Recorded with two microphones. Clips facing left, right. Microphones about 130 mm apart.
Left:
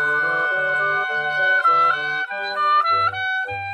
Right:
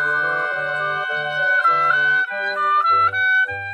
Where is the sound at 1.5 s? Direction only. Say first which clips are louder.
Right 1 dB; 20° left (ahead or behind).